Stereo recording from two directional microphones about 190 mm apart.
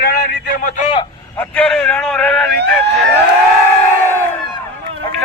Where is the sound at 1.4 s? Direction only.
5° left (ahead or behind).